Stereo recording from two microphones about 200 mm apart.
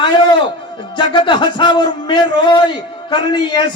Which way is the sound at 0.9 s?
25° left (ahead or behind).